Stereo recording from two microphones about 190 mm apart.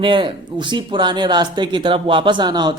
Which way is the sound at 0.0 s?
25° right (ahead or behind).